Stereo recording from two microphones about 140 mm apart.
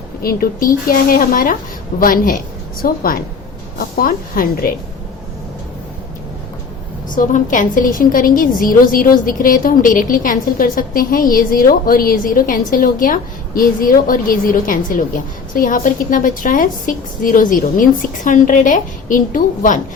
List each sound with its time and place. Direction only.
0.2 s a woman's voice: 90° left
2.0 s a woman's voice: 80° left
2.8 s a woman's voice: 90° left
7.2 s a woman's voice: 65° left (ahead or behind)